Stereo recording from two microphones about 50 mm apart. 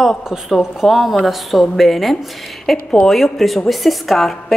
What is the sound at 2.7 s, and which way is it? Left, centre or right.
Speech, centre.